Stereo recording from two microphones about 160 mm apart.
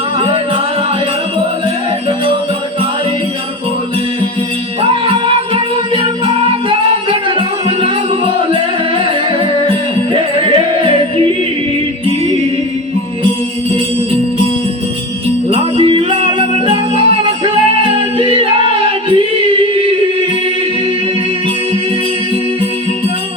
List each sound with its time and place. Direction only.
4.8 s music: 35° right (ahead or behind)
15.4 s jingle bell: 35° right (ahead or behind)
18.2 s choir: 35° right (ahead or behind)